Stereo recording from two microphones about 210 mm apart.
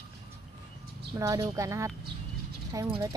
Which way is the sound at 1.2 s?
15° right (ahead or behind).